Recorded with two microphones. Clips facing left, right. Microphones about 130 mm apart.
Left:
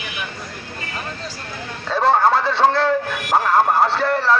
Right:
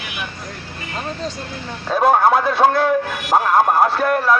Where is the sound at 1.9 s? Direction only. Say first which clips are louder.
Right 2 dB; 15° right (ahead or behind).